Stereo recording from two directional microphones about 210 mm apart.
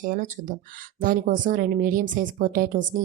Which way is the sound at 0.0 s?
40° right (ahead or behind).